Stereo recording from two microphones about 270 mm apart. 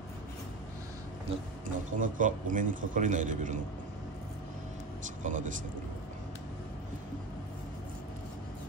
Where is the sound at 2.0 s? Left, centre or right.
Right.